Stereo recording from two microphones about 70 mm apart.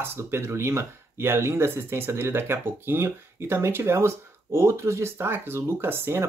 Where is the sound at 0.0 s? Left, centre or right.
Right.